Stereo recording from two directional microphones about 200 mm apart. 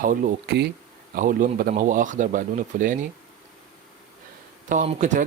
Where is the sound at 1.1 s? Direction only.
45° right (ahead or behind).